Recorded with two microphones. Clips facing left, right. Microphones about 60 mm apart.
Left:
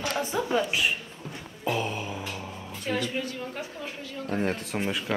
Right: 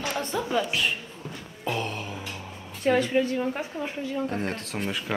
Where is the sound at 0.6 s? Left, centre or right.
Centre.